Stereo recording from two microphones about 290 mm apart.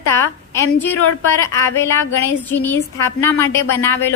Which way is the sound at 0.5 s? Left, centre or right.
Centre.